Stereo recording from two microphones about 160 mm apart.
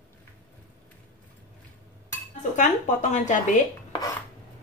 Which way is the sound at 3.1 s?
50° left (ahead or behind).